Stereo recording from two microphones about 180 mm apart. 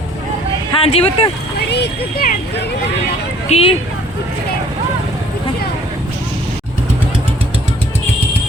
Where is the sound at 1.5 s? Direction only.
65° left (ahead or behind).